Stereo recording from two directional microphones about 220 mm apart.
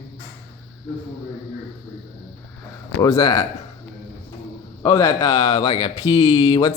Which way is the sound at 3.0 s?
15° left (ahead or behind).